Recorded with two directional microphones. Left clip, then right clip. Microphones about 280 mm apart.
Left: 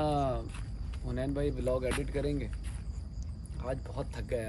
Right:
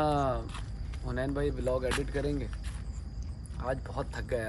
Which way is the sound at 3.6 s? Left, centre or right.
Centre.